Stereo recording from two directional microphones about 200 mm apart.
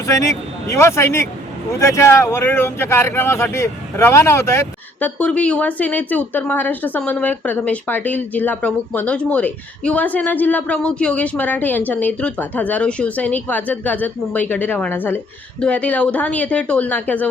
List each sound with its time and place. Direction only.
0.0 s a man's voice: 15° left (ahead or behind)